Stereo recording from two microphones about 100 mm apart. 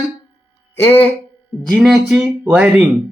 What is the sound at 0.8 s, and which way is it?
Speech, 20° left (ahead or behind).